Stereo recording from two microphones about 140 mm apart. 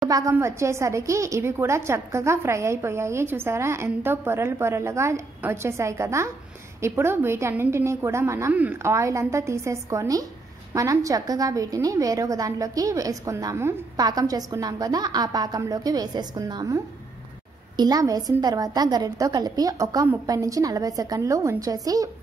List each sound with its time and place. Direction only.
0.1 s a woman's voice: 20° right (ahead or behind)